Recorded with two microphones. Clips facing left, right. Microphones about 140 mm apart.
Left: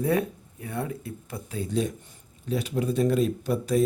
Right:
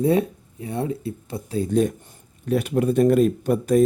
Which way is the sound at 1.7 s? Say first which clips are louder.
Right 7 dB; 55° right (ahead or behind).